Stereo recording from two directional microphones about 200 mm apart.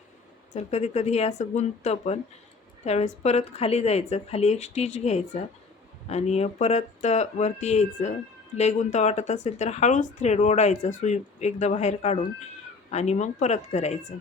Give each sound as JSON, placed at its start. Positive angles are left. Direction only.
{"t": 0.5, "sound": "speech", "side_deg": 35}